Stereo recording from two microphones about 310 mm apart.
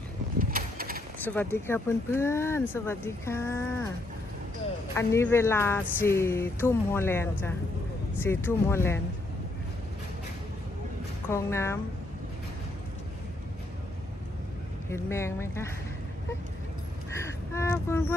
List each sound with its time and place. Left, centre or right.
0.3 s a sound: right
1.2 s speech: centre
4.9 s speech: centre
11.3 s speech: centre
14.8 s speech: centre
17.2 s a sound: centre